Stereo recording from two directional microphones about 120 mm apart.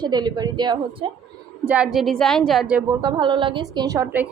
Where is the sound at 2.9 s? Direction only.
35° right (ahead or behind).